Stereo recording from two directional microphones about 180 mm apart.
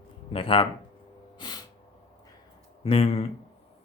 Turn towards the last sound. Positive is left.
turn(degrees=35)  # may be behind; listen again after turning